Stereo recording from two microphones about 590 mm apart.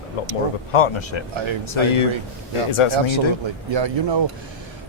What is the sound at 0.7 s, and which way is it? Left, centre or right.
Speech, left.